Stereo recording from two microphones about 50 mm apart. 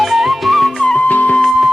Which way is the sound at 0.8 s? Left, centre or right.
Centre.